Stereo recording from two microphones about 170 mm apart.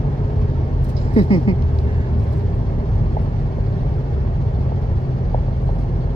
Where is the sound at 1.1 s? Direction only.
35° left (ahead or behind).